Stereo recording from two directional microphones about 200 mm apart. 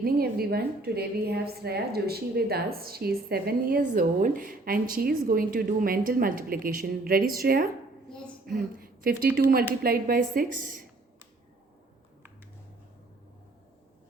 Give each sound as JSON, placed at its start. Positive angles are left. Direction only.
{"t": 0.0, "sound": "a woman's voice", "side_deg": -50}
{"t": 8.1, "sound": "a sound", "side_deg": 0}
{"t": 9.8, "sound": "a woman's voice", "side_deg": -45}